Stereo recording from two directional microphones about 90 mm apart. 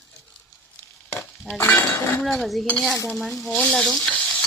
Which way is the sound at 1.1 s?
25° left (ahead or behind).